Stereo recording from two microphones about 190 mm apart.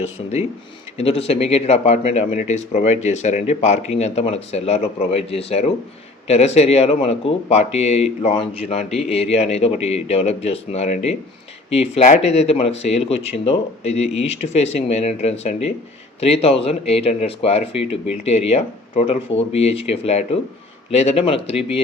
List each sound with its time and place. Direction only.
0.0 s speech: 35° left (ahead or behind)